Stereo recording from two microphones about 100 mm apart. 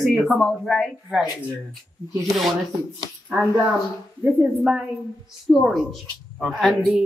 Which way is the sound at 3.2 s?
10° right (ahead or behind).